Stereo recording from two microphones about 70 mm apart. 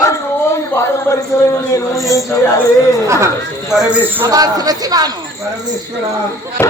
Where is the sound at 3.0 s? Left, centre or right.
Right.